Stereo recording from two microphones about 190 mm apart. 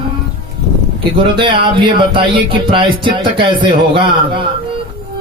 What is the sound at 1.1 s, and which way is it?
A man's voice, 25° right (ahead or behind).